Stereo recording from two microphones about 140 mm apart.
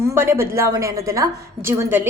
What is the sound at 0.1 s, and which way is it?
A woman's voice, 20° right (ahead or behind).